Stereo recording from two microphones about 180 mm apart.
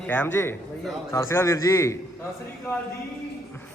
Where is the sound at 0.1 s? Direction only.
10° left (ahead or behind).